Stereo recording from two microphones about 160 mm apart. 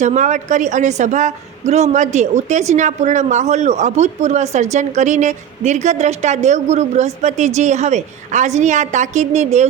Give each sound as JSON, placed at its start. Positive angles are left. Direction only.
{"t": 0.0, "sound": "a woman's voice", "side_deg": -50}